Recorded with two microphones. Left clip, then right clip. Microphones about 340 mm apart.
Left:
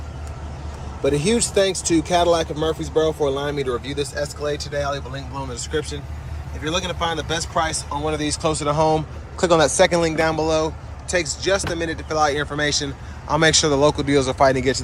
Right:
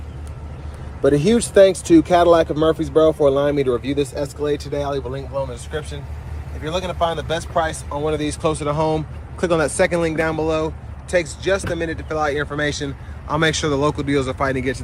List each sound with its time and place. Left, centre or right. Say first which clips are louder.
1.1 s speech: right 5 dB; centre
5.3 s speech: even; centre